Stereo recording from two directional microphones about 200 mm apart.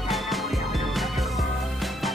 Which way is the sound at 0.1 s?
Centre (ahead or behind).